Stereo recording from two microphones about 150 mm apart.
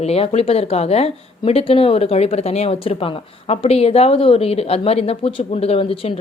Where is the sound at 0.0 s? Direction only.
40° left (ahead or behind).